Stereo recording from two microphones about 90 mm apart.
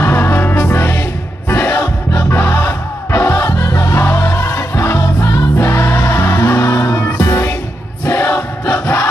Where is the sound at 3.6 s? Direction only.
40° left (ahead or behind).